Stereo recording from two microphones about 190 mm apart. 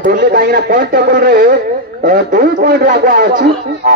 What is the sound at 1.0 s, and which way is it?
Speech, 65° right (ahead or behind).